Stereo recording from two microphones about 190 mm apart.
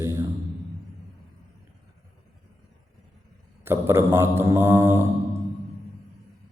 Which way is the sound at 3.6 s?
15° right (ahead or behind).